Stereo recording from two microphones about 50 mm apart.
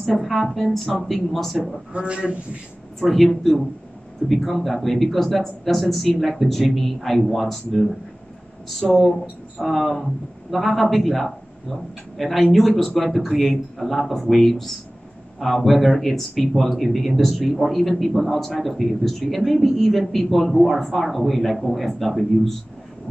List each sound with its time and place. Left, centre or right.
0.0 s speech: centre
1.9 s a man's voice: right
3.0 s speech: centre